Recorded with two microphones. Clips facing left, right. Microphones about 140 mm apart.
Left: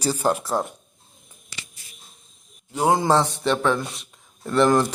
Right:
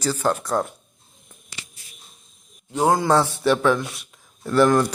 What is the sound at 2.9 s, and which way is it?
Speech, 20° left (ahead or behind).